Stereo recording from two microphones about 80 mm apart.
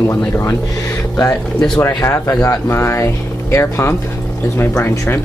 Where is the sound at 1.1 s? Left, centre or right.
Left.